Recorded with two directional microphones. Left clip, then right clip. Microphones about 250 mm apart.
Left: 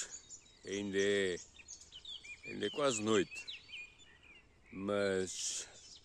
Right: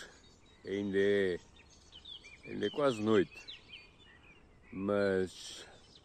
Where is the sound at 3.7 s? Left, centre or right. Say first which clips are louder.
Left 4 dB; right.